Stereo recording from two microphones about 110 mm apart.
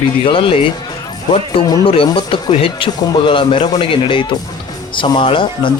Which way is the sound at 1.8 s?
55° left (ahead or behind).